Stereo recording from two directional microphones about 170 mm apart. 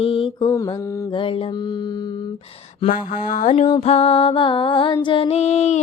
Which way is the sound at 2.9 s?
50° left (ahead or behind).